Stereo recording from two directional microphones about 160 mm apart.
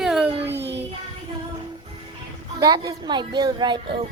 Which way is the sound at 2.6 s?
25° right (ahead or behind).